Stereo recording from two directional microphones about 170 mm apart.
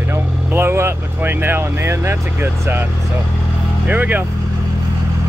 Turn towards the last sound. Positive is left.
turn(degrees=-10)  # may be behind; listen again after turning